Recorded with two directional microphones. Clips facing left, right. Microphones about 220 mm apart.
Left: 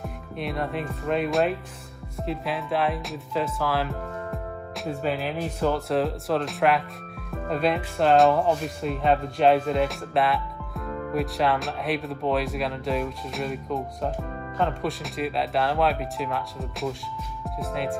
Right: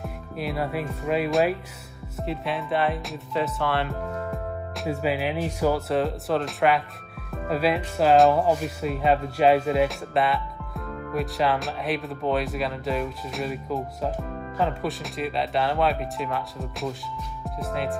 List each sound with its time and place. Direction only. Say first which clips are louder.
0.0 s speech: right 1 dB; centre (ahead or behind)
5.9 s speech: even; centre (ahead or behind)